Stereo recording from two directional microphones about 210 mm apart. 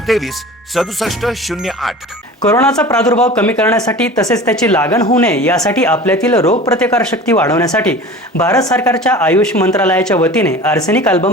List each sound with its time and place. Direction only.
0.1 s speech: centre (ahead or behind)
2.4 s speech: 15° left (ahead or behind)